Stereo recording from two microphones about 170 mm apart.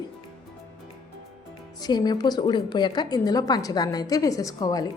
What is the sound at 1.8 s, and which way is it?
A woman's voice, 25° left (ahead or behind).